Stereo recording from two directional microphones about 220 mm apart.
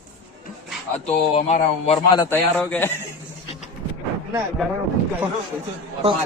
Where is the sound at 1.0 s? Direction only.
30° left (ahead or behind).